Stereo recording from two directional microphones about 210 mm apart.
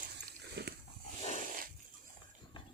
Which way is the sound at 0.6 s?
50° right (ahead or behind).